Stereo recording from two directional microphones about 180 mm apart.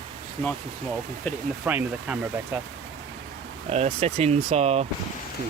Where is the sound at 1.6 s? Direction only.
10° right (ahead or behind).